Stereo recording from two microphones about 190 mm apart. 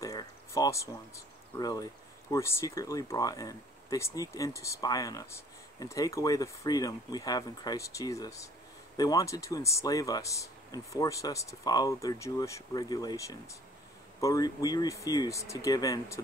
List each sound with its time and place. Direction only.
0.0 s speech: 20° left (ahead or behind)